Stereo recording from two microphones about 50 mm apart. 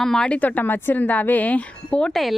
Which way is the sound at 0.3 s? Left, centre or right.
Left.